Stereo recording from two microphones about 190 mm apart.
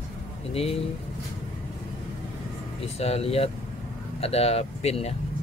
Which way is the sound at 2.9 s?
30° left (ahead or behind).